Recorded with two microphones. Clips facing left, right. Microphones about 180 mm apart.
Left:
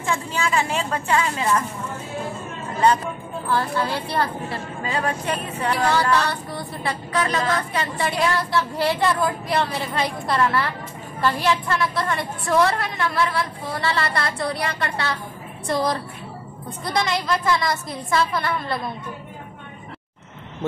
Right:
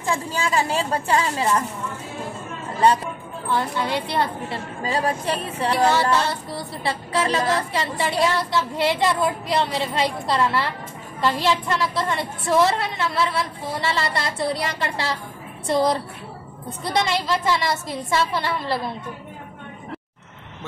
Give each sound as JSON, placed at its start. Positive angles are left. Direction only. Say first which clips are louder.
{"t": 0.0, "sound": "a woman's voice", "louder": "even", "side_deg": -35}
{"t": 3.4, "sound": "female singing", "louder": "left 1 dB", "side_deg": -20}
{"t": 4.8, "sound": "female singing", "louder": "right 2 dB", "side_deg": -35}